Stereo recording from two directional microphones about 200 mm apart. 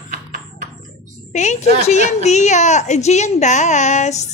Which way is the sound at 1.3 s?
35° left (ahead or behind).